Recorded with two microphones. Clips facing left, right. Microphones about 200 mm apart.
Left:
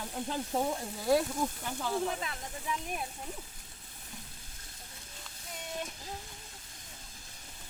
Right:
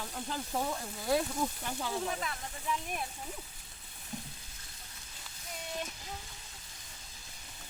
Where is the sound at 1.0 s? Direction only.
Centre (ahead or behind).